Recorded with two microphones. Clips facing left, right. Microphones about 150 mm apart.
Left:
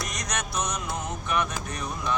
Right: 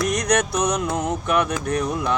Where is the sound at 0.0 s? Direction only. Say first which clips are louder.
Right 12 dB; 65° right (ahead or behind).